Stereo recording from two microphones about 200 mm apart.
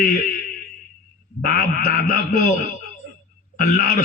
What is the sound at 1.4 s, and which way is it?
Speech, 45° left (ahead or behind).